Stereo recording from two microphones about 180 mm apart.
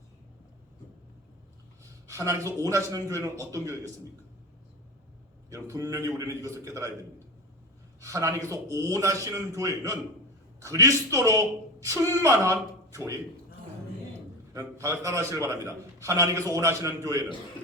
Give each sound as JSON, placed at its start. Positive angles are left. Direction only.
{"t": 1.8, "sound": "a man's voice", "side_deg": -15}
{"t": 5.5, "sound": "a man's voice", "side_deg": -15}
{"t": 8.0, "sound": "a man's voice", "side_deg": -15}
{"t": 14.5, "sound": "a man's voice", "side_deg": -20}